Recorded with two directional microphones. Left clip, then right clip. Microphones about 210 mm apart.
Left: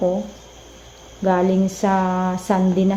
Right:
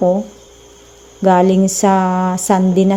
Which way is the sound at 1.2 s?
45° right (ahead or behind).